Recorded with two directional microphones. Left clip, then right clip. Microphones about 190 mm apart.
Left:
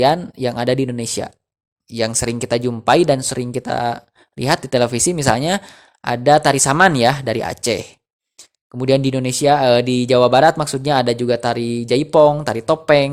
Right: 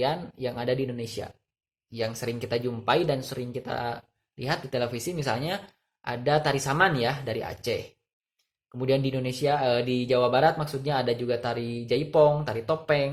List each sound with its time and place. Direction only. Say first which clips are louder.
0.0 s speech: left 12 dB; 55° left (ahead or behind)